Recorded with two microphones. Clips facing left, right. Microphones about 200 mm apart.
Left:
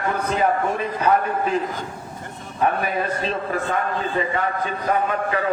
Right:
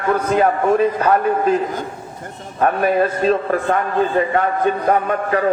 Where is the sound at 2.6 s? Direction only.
50° right (ahead or behind).